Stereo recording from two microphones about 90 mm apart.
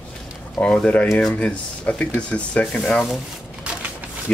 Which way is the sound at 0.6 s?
10° left (ahead or behind).